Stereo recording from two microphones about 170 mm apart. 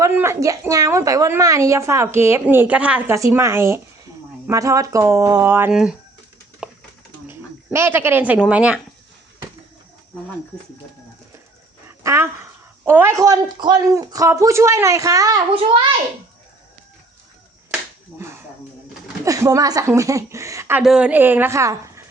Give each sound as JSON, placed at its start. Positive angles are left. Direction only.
{"t": 0.1, "sound": "a woman's voice", "side_deg": -15}
{"t": 5.7, "sound": "speech", "side_deg": -5}
{"t": 6.6, "sound": "a sound", "side_deg": -5}
{"t": 7.3, "sound": "speech", "side_deg": -15}
{"t": 11.9, "sound": "a woman's voice", "side_deg": -15}
{"t": 19.2, "sound": "a woman's voice", "side_deg": -20}